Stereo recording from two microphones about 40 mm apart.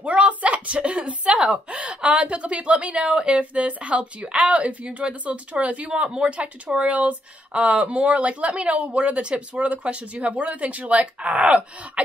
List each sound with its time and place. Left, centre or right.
0.0 s speech: right